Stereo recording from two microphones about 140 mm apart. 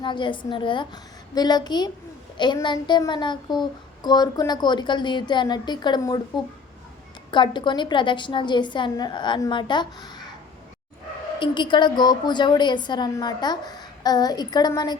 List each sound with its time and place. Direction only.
0.0 s a woman's voice: 35° left (ahead or behind)
7.3 s a woman's voice: 35° left (ahead or behind)
11.3 s a woman's voice: 35° left (ahead or behind)